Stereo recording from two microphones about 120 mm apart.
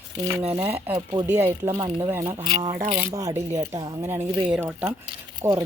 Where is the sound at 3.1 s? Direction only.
30° right (ahead or behind).